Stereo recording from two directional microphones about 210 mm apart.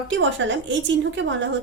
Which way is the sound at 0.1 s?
60° right (ahead or behind).